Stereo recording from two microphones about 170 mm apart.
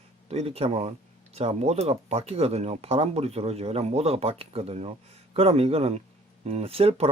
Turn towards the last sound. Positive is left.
turn(degrees=-35)  # may be behind; listen again after turning